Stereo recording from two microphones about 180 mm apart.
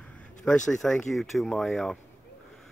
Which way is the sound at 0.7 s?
Centre (ahead or behind).